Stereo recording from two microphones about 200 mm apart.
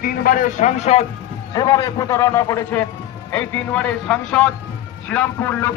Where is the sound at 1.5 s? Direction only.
20° left (ahead or behind).